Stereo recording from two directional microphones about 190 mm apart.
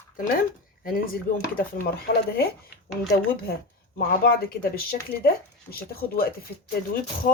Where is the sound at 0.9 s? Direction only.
50° left (ahead or behind).